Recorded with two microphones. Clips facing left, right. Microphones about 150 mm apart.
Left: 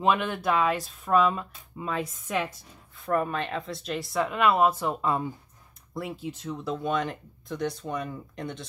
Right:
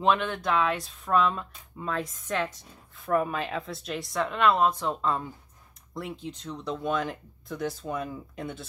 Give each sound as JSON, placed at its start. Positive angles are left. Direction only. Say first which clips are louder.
{"t": 0.0, "sound": "speech", "louder": "left 1 dB", "side_deg": 10}
{"t": 3.1, "sound": "speech", "louder": "even", "side_deg": -5}